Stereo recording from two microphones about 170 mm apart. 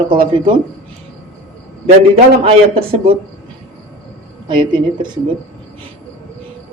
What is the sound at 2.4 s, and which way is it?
Speech, 35° right (ahead or behind).